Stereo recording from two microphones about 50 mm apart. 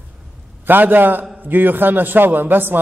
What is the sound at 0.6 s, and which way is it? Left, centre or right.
A man's voice, right.